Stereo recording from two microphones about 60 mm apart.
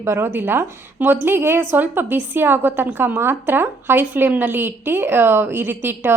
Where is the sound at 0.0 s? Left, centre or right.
Right.